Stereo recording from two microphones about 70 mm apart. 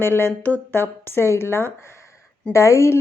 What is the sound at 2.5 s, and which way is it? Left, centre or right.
Speech, left.